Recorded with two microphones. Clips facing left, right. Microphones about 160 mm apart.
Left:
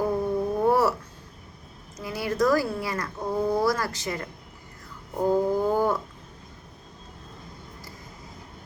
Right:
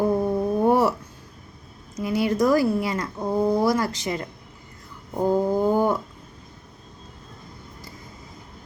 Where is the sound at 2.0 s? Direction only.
20° right (ahead or behind).